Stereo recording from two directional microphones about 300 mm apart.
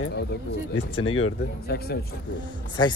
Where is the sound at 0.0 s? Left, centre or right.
Left.